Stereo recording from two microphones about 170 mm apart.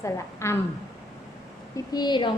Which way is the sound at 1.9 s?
25° left (ahead or behind).